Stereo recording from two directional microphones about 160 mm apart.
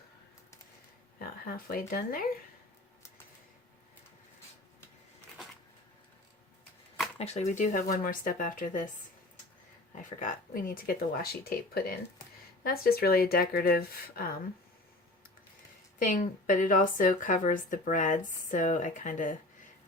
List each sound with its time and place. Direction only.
1.2 s speech: 65° left (ahead or behind)
7.2 s speech: 45° left (ahead or behind); by 14.3 s 70° left (ahead or behind)
16.0 s speech: 60° left (ahead or behind)